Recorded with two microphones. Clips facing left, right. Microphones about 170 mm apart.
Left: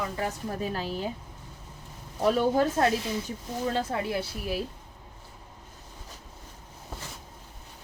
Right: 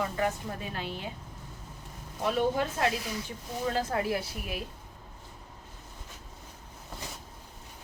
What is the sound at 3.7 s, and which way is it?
Speech, 25° left (ahead or behind).